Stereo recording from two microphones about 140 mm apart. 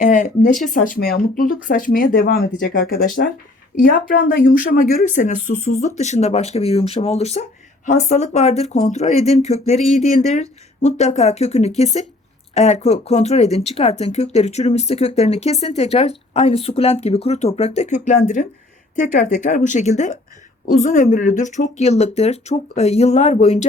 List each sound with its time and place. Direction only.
0.0 s speech: 65° left (ahead or behind)
5.0 s speech: 65° left (ahead or behind)
9.7 s speech: centre (ahead or behind)
10.3 s speech: 55° left (ahead or behind)